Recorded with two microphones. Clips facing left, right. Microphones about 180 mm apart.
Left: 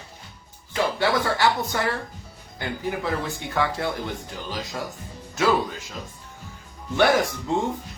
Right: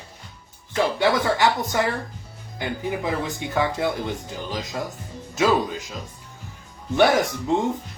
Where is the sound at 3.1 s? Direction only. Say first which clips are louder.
Right 1 dB; 20° right (ahead or behind).